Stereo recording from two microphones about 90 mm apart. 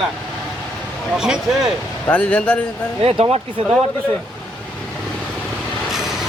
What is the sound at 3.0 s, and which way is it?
Speech, 90° right.